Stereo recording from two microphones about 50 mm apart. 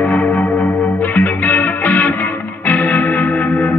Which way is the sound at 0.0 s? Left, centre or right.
Left.